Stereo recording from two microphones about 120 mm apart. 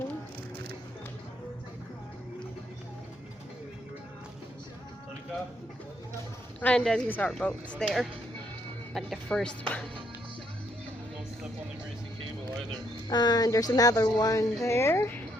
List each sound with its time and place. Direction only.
6.6 s a woman's voice: 10° left (ahead or behind)
13.1 s speech: 35° left (ahead or behind); by 15.2 s 20° left (ahead or behind)